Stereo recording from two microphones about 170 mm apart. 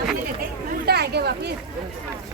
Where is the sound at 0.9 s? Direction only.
70° right (ahead or behind).